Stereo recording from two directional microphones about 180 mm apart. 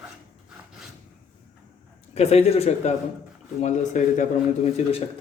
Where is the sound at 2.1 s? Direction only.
35° left (ahead or behind).